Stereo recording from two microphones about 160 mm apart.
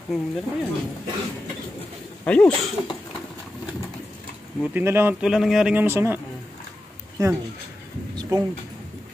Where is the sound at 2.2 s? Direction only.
10° left (ahead or behind).